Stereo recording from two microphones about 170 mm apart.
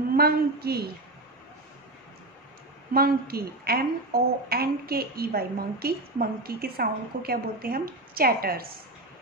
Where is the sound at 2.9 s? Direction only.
60° right (ahead or behind).